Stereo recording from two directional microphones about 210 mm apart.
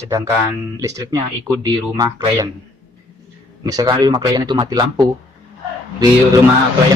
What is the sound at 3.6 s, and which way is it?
A man's voice, 15° right (ahead or behind).